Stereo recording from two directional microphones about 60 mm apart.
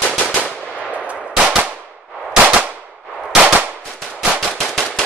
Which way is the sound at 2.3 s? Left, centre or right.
Centre.